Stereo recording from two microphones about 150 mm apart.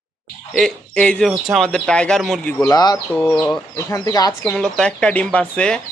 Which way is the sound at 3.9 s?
25° left (ahead or behind).